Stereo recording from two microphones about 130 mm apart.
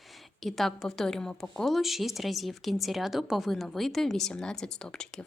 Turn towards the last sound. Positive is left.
turn(degrees=5)  # may be behind; listen again after turning